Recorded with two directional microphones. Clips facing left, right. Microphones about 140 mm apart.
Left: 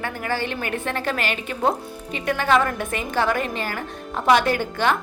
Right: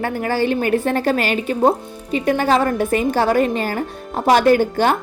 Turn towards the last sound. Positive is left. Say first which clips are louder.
# right 7 dB
turn(degrees=-40)  # may be behind; listen again after turning